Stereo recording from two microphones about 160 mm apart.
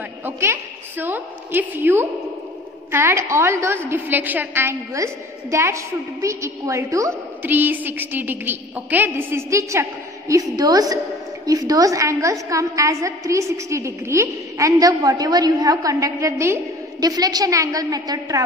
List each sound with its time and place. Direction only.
0.2 s a woman's voice: 15° right (ahead or behind)